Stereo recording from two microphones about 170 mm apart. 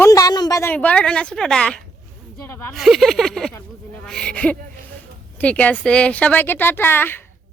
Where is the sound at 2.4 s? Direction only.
15° left (ahead or behind).